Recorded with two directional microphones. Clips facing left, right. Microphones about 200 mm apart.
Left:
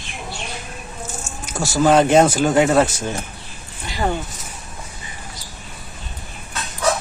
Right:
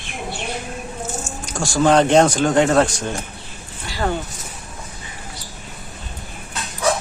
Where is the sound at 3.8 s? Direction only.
15° left (ahead or behind).